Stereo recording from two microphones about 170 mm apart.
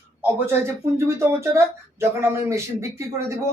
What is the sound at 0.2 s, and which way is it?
Speech, 10° right (ahead or behind).